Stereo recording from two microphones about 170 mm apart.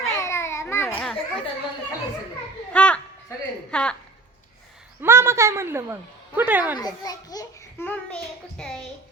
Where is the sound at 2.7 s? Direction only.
5° left (ahead or behind).